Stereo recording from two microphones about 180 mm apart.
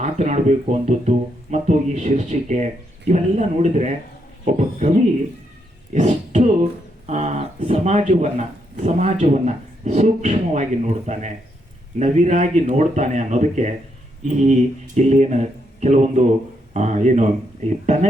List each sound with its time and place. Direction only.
0.0 s speech: 40° right (ahead or behind)
5.9 s a sound: 40° right (ahead or behind)
7.1 s speech: 40° right (ahead or behind)